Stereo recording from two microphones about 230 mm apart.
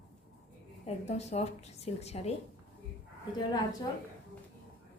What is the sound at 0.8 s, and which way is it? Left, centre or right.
Speech, left.